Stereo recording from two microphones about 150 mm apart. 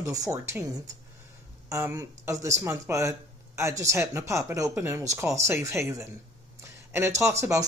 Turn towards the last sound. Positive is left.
turn(degrees=-20)  # may be behind; listen again after turning